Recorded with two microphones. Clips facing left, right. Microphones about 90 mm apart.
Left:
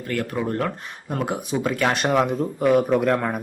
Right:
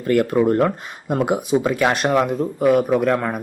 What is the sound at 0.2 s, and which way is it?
Speech, 20° right (ahead or behind).